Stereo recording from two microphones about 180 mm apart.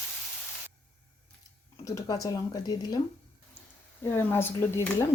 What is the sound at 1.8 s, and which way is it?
Speech, 20° left (ahead or behind).